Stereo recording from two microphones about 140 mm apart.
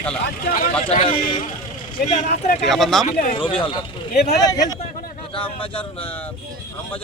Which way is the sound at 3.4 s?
40° left (ahead or behind).